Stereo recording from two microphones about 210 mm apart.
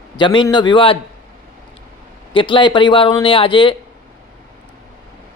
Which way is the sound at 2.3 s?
25° left (ahead or behind).